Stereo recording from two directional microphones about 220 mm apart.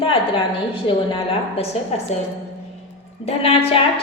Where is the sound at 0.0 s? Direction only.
25° left (ahead or behind).